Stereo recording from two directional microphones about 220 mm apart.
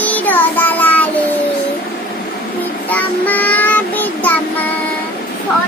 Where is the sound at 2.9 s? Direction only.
5° left (ahead or behind).